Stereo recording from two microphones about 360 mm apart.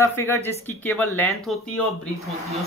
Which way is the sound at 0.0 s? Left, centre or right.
Centre.